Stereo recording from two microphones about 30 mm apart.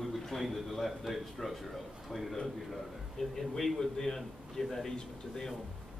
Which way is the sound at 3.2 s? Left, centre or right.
Centre.